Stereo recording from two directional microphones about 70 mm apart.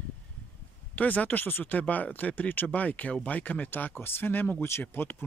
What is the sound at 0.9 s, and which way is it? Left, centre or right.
Speech, left.